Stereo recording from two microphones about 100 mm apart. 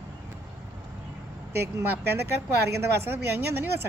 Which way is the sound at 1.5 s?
25° right (ahead or behind).